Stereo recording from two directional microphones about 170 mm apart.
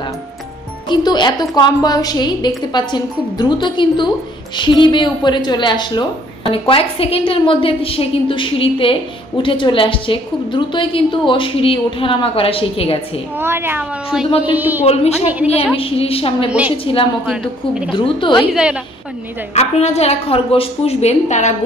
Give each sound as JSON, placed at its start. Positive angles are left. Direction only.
{"t": 0.8, "sound": "a woman's voice", "side_deg": 25}
{"t": 13.4, "sound": "speech", "side_deg": -15}
{"t": 15.7, "sound": "a woman's voice", "side_deg": 35}
{"t": 16.4, "sound": "speech", "side_deg": -5}
{"t": 16.7, "sound": "a woman's voice", "side_deg": 30}
{"t": 17.3, "sound": "a woman's voice", "side_deg": -5}
{"t": 17.9, "sound": "a woman's voice", "side_deg": 30}
{"t": 18.5, "sound": "a woman's voice", "side_deg": -5}
{"t": 19.5, "sound": "a woman's voice", "side_deg": 40}